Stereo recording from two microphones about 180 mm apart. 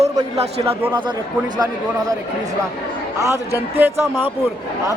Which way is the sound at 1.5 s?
20° right (ahead or behind).